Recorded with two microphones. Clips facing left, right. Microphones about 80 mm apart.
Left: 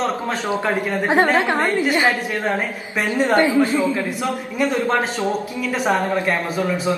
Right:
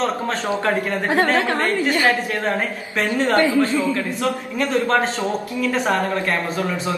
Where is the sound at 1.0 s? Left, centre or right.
Left.